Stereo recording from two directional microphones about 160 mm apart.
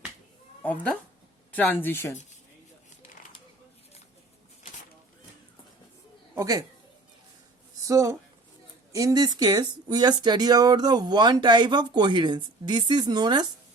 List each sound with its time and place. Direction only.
0.6 s speech: 10° left (ahead or behind)
6.3 s speech: 20° right (ahead or behind)
7.9 s speech: 20° right (ahead or behind)